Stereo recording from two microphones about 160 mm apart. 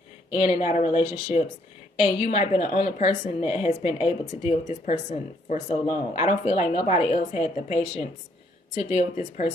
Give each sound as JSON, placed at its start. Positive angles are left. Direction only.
{"t": 0.4, "sound": "speech", "side_deg": 45}